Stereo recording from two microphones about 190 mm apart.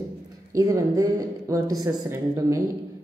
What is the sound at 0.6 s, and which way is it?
A woman's voice, 20° right (ahead or behind).